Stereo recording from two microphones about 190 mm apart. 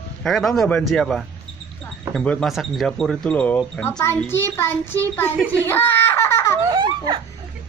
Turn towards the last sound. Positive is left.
turn(degrees=-25)  # may be behind; listen again after turning